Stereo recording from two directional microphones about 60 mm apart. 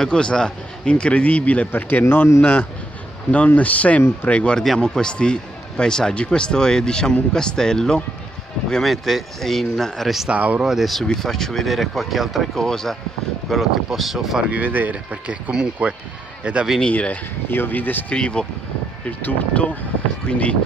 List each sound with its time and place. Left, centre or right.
0.0 s speech: centre; by 2.2 s left
3.3 s speech: left
4.6 s speech: centre
10.3 s speech: right
10.6 s speech: centre
12.6 s speech: centre
13.5 s speech: centre
14.5 s speech: right
15.5 s speech: centre
16.9 s speech: left
17.5 s speech: left
18.1 s speech: centre